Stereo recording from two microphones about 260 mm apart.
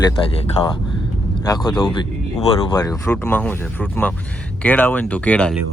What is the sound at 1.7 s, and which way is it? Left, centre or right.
Speech, centre.